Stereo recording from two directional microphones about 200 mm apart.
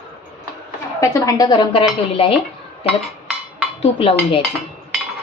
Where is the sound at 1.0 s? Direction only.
15° left (ahead or behind).